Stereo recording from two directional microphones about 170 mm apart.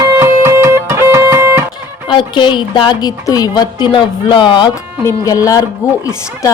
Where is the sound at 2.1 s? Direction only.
30° left (ahead or behind).